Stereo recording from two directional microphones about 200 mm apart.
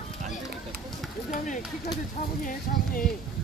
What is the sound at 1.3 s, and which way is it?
Speech, 40° left (ahead or behind).